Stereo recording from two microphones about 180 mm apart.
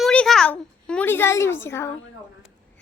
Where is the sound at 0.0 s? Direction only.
5° left (ahead or behind).